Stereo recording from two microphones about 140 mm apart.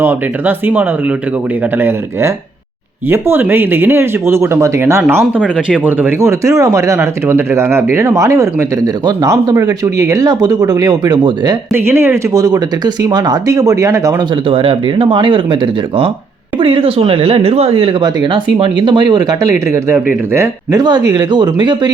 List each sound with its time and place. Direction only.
0.0 s speech: 15° right (ahead or behind)
3.1 s speech: 15° right (ahead or behind)
5.2 s speech: 5° right (ahead or behind); by 11.5 s 30° right (ahead or behind)
11.7 s speech: 15° right (ahead or behind)
14.4 s speech: 40° right (ahead or behind)
18.0 s speech: 35° right (ahead or behind)
21.1 s speech: 30° right (ahead or behind)